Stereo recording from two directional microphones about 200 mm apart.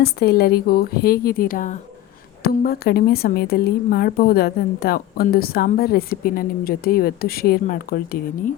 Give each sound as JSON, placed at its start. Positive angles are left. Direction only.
{"t": 0.0, "sound": "a woman's voice", "side_deg": 50}